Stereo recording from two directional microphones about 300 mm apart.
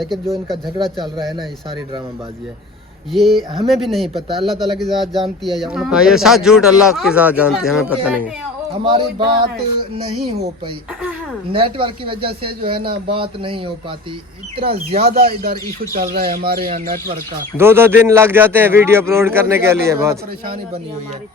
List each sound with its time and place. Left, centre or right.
0.0 s speech: centre
3.1 s speech: centre
8.8 s a man's voice: centre
11.5 s a man's voice: centre
14.9 s speech: right
17.6 s a man's voice: centre